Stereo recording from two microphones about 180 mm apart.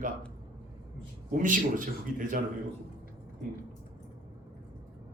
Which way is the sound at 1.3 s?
45° right (ahead or behind).